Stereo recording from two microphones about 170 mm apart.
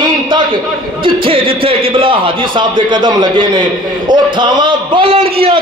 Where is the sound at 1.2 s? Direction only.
30° right (ahead or behind).